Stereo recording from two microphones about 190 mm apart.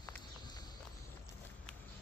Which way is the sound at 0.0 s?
20° left (ahead or behind).